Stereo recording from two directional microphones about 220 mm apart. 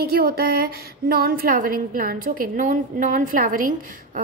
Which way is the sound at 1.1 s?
45° right (ahead or behind).